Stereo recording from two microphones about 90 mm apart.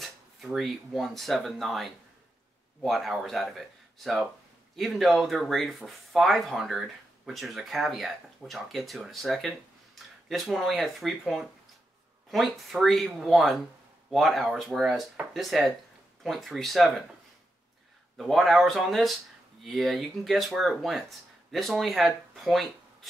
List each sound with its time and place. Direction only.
0.0 s speech: centre (ahead or behind)
18.1 s speech: centre (ahead or behind)